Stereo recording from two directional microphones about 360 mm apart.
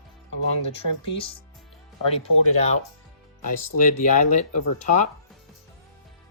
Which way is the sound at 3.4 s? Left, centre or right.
Left.